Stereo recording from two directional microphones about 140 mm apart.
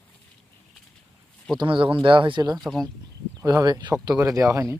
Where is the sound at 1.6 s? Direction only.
40° right (ahead or behind).